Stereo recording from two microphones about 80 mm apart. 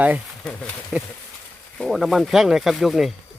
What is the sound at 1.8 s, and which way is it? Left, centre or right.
Speech, centre.